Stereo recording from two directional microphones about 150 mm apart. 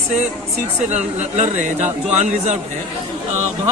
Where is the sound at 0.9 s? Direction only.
50° right (ahead or behind).